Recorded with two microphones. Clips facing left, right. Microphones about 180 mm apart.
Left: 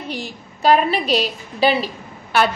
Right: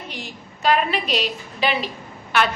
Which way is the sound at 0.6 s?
35° left (ahead or behind).